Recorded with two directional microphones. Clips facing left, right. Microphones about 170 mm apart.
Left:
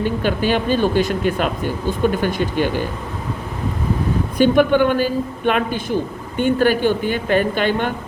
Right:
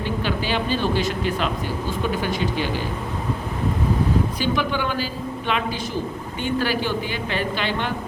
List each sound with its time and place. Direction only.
0.0 s a woman's voice: 50° left (ahead or behind)
4.4 s a woman's voice: 55° left (ahead or behind)